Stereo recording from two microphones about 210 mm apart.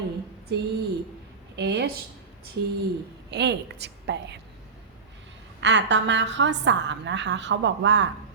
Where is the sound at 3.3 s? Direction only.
55° right (ahead or behind).